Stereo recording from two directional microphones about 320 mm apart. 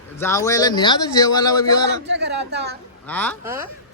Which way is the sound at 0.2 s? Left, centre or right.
Centre.